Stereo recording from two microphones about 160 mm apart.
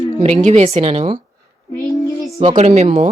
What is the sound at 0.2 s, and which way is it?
A woman's voice, 45° right (ahead or behind).